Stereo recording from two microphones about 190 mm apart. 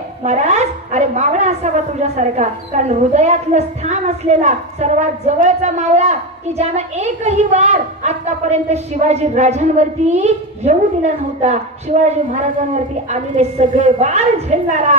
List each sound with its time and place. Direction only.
0.2 s a woman's voice: 40° right (ahead or behind)